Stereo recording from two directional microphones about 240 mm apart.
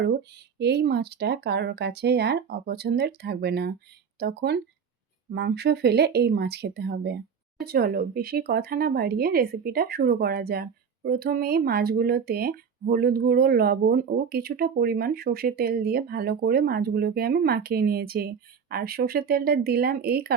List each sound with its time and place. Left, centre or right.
0.0 s speech: right